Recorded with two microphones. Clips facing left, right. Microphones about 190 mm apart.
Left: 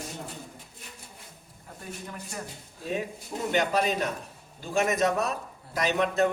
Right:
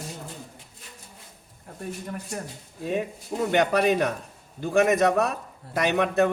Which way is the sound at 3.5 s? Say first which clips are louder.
Right 5 dB; 65° right (ahead or behind).